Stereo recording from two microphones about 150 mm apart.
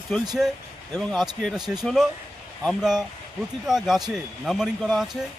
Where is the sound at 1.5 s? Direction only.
25° right (ahead or behind).